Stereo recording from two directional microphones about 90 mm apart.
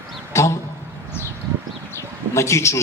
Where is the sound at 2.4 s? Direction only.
30° left (ahead or behind).